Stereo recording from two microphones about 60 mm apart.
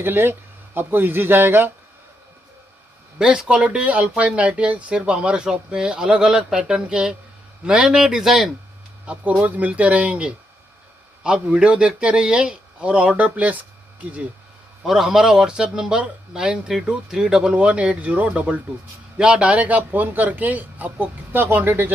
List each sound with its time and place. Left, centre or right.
0.0 s speech: right
3.2 s speech: centre
9.0 s a man's voice: right
14.8 s a man's voice: centre; by 21.9 s right